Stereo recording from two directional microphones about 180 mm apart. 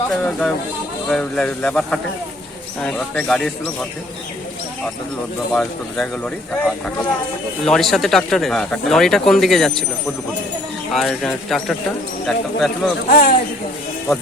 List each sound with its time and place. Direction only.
0.1 s a man's voice: 5° left (ahead or behind)
5.5 s speech: 5° left (ahead or behind)
10.9 s speech: centre (ahead or behind)
13.1 s speech: 50° left (ahead or behind)